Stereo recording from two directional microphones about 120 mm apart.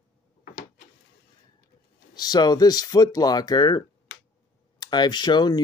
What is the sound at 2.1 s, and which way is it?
Speech, 35° left (ahead or behind).